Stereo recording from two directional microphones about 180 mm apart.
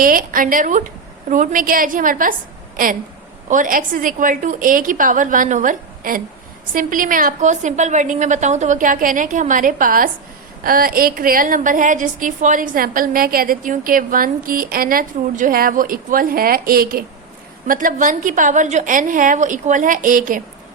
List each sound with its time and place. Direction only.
0.0 s a woman's voice: 50° right (ahead or behind)